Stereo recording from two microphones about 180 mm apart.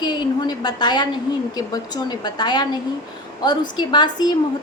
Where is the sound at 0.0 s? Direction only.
25° left (ahead or behind).